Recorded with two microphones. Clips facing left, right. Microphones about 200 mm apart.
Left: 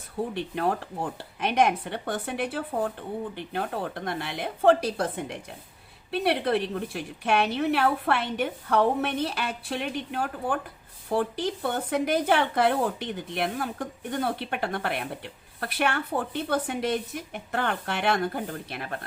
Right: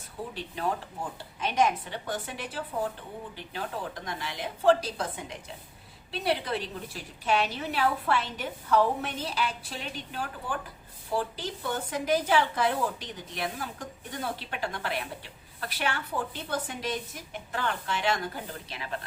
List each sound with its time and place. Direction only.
0.3 s a woman's voice: 60° left (ahead or behind)